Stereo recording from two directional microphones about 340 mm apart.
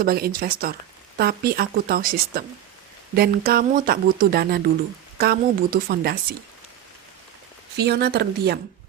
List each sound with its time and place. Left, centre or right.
0.0 s speech: right
7.8 s speech: right